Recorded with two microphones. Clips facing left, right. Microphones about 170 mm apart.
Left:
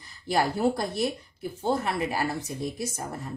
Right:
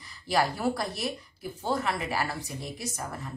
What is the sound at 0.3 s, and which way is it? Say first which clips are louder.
Speech: left 2 dB; 25° left (ahead or behind).